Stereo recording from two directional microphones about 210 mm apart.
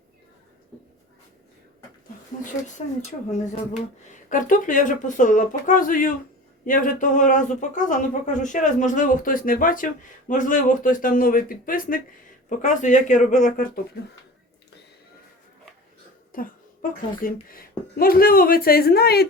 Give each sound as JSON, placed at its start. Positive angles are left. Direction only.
{"t": 3.3, "sound": "speech", "side_deg": 30}
{"t": 16.3, "sound": "speech", "side_deg": 40}